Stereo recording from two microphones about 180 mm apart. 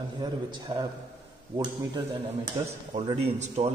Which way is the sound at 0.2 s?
25° right (ahead or behind).